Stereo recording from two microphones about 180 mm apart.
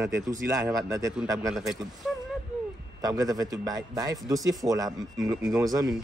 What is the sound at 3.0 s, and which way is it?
A man's voice, 20° right (ahead or behind).